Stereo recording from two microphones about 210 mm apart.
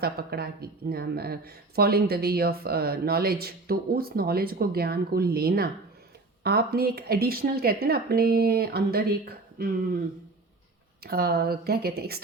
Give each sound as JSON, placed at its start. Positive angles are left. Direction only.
{"t": 0.0, "sound": "speech", "side_deg": -50}
{"t": 11.0, "sound": "speech", "side_deg": -50}